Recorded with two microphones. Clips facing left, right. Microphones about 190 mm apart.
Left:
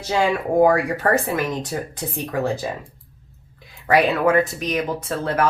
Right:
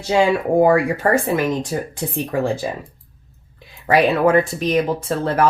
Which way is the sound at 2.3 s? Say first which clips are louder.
Right 2 dB; 30° right (ahead or behind).